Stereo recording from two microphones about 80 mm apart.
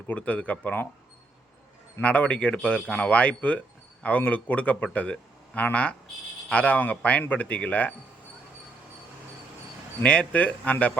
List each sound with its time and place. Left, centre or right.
0.1 s speech: centre
2.0 s a man's voice: centre
10.0 s speech: centre